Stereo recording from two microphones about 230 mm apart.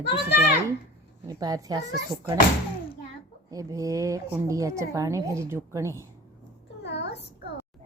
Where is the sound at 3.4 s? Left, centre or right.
Centre.